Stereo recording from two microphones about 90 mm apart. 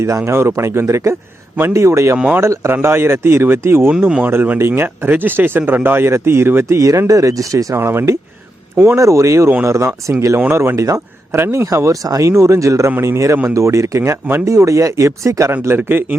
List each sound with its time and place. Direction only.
0.3 s speech: 30° right (ahead or behind)
2.1 s speech: 10° right (ahead or behind)
2.4 s speech: 30° right (ahead or behind)
7.8 s speech: 25° right (ahead or behind)